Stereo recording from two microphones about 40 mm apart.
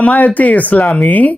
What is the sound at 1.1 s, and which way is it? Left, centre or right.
Speech, left.